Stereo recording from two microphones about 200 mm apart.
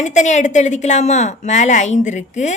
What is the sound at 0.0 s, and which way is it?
Speech, 35° left (ahead or behind).